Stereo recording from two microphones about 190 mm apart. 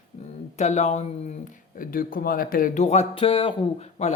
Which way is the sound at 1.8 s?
45° left (ahead or behind).